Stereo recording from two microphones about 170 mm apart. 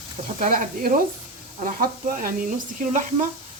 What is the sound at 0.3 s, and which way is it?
Speech, 50° right (ahead or behind).